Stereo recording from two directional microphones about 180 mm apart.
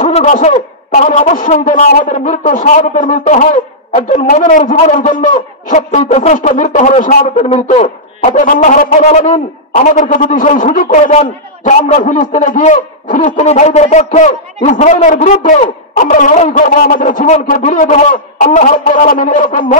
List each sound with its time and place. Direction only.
0.0 s a man's voice: 45° left (ahead or behind)